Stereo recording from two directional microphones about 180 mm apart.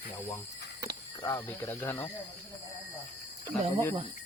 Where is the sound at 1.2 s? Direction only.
15° left (ahead or behind).